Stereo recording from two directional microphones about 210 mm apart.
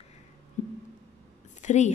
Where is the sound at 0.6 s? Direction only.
35° left (ahead or behind).